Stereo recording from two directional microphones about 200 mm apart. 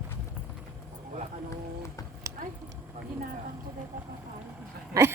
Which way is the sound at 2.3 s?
15° right (ahead or behind).